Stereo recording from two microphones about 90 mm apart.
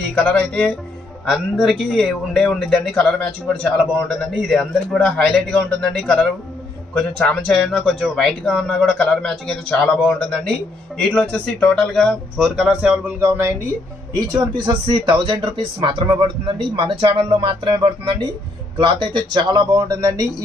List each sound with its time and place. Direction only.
0.1 s speech: 10° left (ahead or behind)
1.3 s a man's voice: centre (ahead or behind)
11.0 s a man's voice: 5° left (ahead or behind)
13.2 s speech: 30° right (ahead or behind)
14.3 s speech: 60° right (ahead or behind)
19.8 s speech: 40° right (ahead or behind)